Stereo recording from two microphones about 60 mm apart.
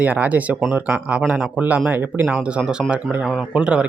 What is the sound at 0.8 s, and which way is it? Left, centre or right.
Speech, right.